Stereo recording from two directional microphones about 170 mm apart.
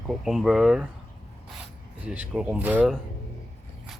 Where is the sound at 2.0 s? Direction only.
10° right (ahead or behind).